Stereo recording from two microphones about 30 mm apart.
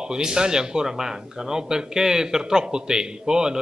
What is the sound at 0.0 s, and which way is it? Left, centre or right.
A man's voice, right.